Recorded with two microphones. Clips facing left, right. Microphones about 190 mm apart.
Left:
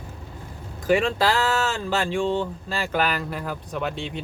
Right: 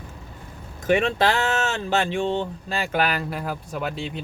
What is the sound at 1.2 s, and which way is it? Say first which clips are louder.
Speech: even; 20° right (ahead or behind).